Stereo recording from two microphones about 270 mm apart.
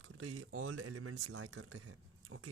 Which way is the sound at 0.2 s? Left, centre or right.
Right.